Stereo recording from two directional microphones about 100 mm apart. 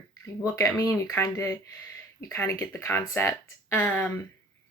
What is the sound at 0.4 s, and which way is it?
Speech, 20° left (ahead or behind).